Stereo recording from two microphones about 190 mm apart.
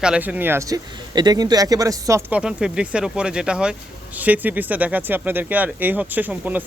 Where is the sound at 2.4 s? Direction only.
5° right (ahead or behind).